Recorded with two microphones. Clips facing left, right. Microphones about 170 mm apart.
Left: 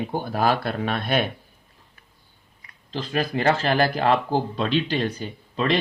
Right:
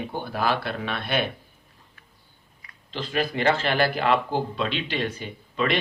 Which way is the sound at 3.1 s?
40° left (ahead or behind).